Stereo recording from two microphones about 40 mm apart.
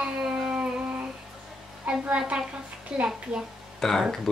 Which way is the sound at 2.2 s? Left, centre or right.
Right.